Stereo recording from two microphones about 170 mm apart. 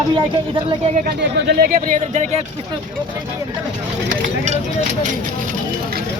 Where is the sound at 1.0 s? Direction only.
70° right (ahead or behind); by 2.2 s 55° right (ahead or behind).